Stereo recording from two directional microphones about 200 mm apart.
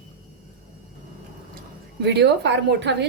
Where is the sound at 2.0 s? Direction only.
60° right (ahead or behind).